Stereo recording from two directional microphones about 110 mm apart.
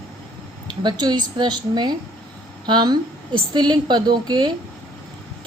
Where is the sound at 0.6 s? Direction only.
40° right (ahead or behind).